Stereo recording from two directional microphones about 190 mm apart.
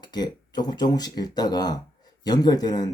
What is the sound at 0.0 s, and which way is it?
Speech, 20° left (ahead or behind).